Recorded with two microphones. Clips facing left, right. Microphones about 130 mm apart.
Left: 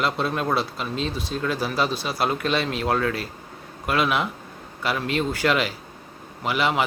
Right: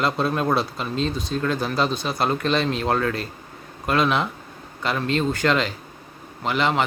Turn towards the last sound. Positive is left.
turn(degrees=5)  # may be behind; listen again after turning